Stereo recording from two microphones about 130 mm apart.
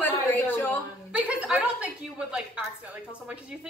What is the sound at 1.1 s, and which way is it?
A woman's voice, 10° right (ahead or behind).